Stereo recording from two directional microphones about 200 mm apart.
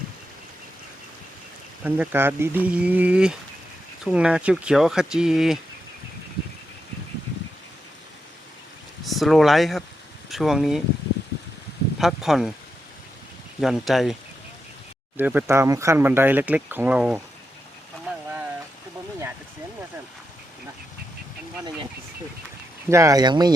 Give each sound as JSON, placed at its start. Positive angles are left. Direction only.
{"t": 1.8, "sound": "speech", "side_deg": -10}
{"t": 9.0, "sound": "speech", "side_deg": 0}
{"t": 11.9, "sound": "speech", "side_deg": 0}
{"t": 13.6, "sound": "speech", "side_deg": 0}
{"t": 15.2, "sound": "speech", "side_deg": -10}
{"t": 22.9, "sound": "speech", "side_deg": -15}